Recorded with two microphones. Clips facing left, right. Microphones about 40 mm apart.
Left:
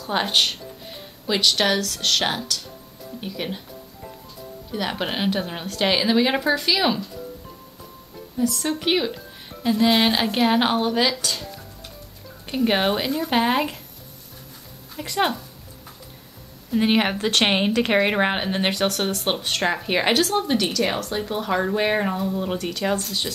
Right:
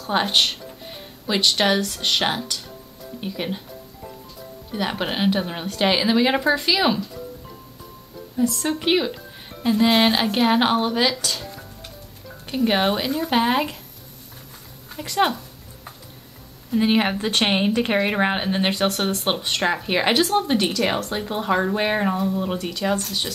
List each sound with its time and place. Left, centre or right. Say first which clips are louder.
0.0 s a woman's voice: right 1 dB; centre
4.7 s a woman's voice: right 1 dB; centre
8.5 s a woman's voice: right 1 dB; centre
12.4 s a woman's voice: right 1 dB; centre
15.0 s a woman's voice: right 2 dB; centre
16.8 s speech: even; left
18.1 s a woman's voice: even; centre
18.9 s a woman's voice: right 1 dB; centre